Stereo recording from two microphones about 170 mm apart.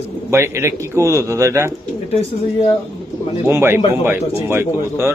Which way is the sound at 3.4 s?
15° right (ahead or behind).